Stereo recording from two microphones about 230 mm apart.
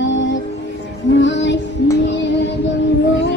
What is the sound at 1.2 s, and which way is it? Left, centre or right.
Music, left.